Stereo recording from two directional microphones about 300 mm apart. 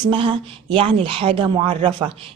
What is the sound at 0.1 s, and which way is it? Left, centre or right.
Speech, centre.